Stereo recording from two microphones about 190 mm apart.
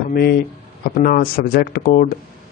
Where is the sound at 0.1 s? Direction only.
55° left (ahead or behind).